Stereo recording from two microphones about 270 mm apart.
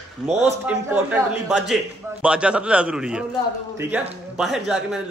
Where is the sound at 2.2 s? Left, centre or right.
Centre.